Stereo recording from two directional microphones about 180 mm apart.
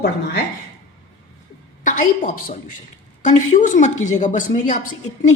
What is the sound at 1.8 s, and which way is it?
A woman's voice, 45° left (ahead or behind).